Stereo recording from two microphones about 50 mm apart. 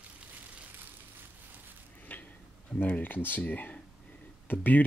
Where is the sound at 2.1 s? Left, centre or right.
Left.